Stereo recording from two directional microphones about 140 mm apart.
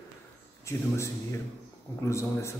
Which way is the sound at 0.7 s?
20° left (ahead or behind).